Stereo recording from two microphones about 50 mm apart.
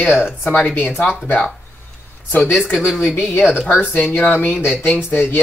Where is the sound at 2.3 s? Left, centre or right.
Left.